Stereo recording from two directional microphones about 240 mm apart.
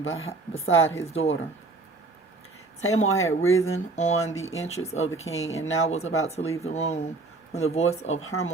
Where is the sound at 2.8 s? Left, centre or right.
Left.